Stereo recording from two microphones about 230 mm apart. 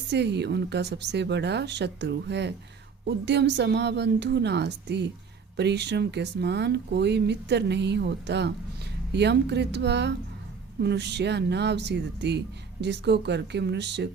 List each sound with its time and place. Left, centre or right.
0.1 s speech: right